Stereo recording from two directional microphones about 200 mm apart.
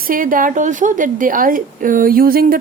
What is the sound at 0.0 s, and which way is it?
Speech, 45° right (ahead or behind).